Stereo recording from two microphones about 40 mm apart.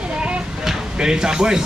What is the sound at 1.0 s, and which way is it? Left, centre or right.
Speech, centre.